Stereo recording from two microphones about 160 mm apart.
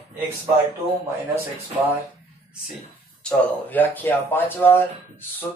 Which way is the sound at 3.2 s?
10° left (ahead or behind).